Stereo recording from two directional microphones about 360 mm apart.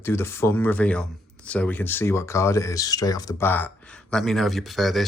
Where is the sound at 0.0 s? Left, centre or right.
Centre.